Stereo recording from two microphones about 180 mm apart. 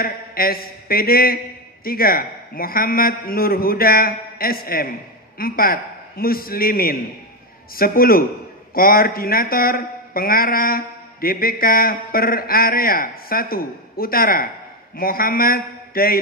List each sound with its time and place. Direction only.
0.0 s a man's voice: 55° left (ahead or behind)